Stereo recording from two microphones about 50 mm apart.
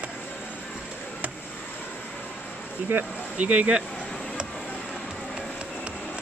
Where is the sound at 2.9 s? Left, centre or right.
Right.